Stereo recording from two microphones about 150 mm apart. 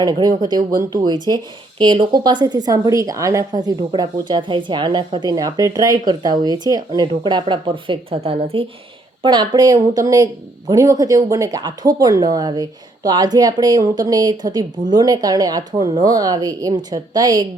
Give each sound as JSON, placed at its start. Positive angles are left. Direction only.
{"t": 0.0, "sound": "speech", "side_deg": -25}